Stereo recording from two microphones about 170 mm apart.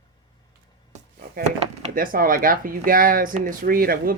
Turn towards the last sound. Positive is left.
turn(degrees=-60)  # may be behind; listen again after turning